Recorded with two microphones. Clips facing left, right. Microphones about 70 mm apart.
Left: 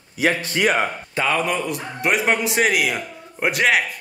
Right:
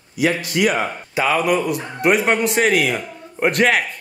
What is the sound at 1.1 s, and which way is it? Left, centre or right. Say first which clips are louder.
Speech: right 6 dB; centre.